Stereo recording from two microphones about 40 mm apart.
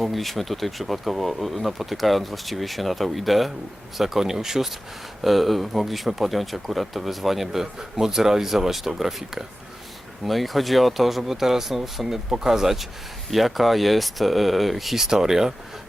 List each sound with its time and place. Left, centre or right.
0.0 s speech: centre